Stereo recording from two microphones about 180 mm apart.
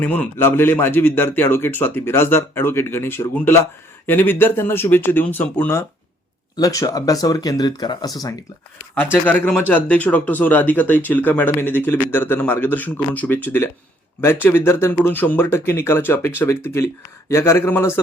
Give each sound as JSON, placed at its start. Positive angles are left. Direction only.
{"t": 0.0, "sound": "speech", "side_deg": 10}
{"t": 9.2, "sound": "speech", "side_deg": 10}